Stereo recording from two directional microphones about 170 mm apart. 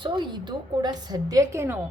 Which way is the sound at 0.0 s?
25° right (ahead or behind).